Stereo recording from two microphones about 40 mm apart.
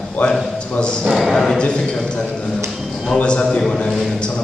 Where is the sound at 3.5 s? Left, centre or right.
Centre.